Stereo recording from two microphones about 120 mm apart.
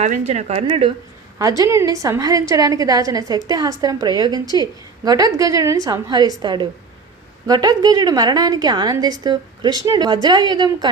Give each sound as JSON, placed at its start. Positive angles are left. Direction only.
{"t": 0.0, "sound": "speech", "side_deg": -75}
{"t": 1.4, "sound": "a woman's voice", "side_deg": -30}